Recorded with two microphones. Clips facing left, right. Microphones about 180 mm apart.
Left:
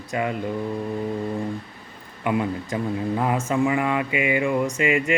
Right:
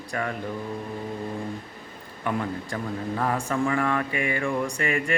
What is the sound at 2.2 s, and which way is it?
Speech, 10° left (ahead or behind).